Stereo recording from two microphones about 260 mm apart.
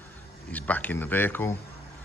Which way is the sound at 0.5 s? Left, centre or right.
Centre.